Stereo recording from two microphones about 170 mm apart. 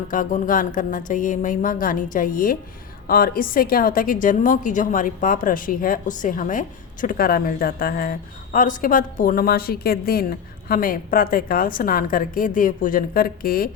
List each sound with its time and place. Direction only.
0.1 s a woman's voice: 50° left (ahead or behind)